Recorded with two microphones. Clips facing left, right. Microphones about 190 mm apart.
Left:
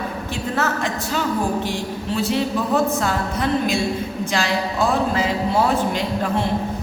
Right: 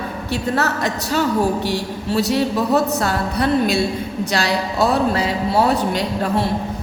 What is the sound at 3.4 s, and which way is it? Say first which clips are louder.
Speech: right 4 dB; 35° right (ahead or behind).